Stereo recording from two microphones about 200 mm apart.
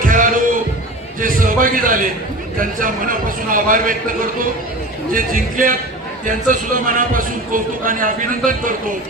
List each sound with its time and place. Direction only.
0.0 s a sound: 45° right (ahead or behind)
1.2 s a man's voice: 45° right (ahead or behind)
5.1 s a man's voice: 45° right (ahead or behind)